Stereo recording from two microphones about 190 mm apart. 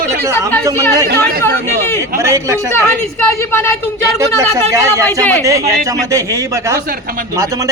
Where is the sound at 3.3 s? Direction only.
15° left (ahead or behind).